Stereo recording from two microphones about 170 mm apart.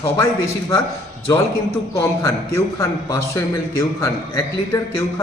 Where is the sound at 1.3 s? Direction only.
20° left (ahead or behind).